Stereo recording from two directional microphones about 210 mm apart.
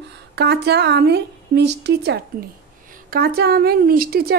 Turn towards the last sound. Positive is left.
turn(degrees=-45)  # may be behind; listen again after turning